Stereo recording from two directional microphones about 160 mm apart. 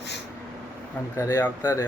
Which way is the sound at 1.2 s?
15° left (ahead or behind).